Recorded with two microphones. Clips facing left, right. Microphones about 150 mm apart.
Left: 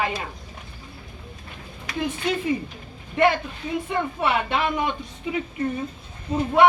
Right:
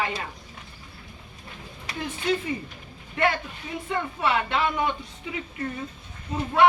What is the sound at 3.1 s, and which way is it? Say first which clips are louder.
A woman's voice: left 5 dB; 20° left (ahead or behind).